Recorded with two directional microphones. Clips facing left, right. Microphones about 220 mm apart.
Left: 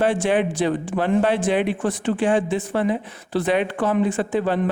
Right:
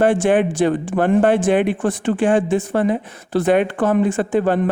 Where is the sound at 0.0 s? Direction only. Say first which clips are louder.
Right 4 dB; 50° right (ahead or behind).